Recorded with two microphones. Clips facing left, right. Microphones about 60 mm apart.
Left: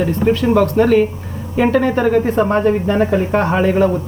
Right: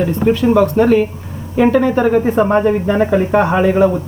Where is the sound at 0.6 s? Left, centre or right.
Centre.